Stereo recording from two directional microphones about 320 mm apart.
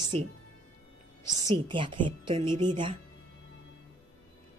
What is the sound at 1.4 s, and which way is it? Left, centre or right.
Speech, centre.